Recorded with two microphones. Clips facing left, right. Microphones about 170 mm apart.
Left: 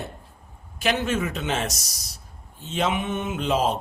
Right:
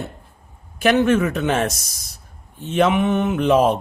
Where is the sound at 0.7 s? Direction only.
55° right (ahead or behind).